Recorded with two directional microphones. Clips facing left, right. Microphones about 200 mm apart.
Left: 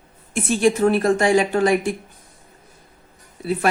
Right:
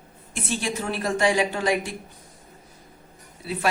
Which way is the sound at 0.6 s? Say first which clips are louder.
Left 14 dB; 50° left (ahead or behind).